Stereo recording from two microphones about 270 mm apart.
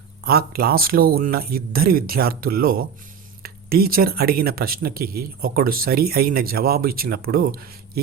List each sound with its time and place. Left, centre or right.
0.3 s speech: right